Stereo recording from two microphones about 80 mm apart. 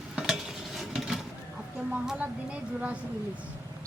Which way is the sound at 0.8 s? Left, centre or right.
Centre.